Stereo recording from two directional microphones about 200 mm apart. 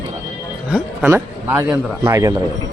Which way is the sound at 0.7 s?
5° right (ahead or behind).